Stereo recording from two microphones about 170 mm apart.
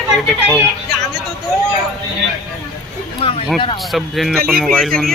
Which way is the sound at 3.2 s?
35° left (ahead or behind).